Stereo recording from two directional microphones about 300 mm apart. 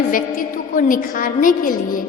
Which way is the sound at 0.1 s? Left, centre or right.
Left.